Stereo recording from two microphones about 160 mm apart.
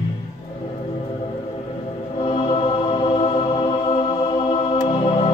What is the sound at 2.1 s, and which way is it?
Music, 30° left (ahead or behind).